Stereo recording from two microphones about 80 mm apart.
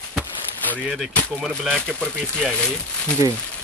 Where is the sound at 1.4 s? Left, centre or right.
Centre.